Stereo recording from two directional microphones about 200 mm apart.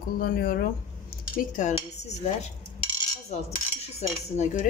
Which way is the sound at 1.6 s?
35° left (ahead or behind).